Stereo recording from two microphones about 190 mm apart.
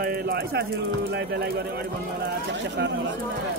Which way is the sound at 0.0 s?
55° right (ahead or behind).